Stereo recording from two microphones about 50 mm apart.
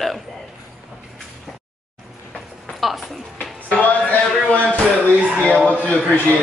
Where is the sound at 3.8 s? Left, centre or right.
Left.